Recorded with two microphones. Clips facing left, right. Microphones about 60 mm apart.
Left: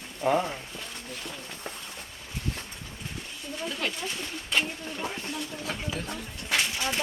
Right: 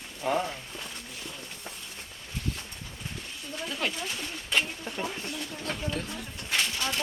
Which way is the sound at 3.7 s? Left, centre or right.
Centre.